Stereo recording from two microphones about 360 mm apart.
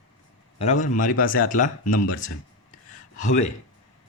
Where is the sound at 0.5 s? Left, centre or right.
Centre.